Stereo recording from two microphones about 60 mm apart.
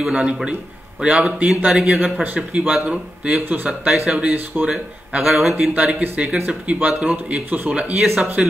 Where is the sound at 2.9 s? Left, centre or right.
Centre.